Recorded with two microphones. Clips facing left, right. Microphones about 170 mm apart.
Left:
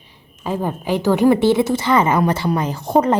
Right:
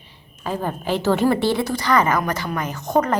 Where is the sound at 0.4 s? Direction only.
15° left (ahead or behind).